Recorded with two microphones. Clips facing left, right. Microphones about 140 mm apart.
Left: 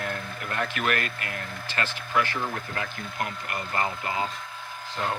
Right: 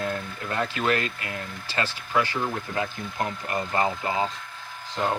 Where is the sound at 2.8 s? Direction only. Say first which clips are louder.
Right 5 dB; 25° right (ahead or behind).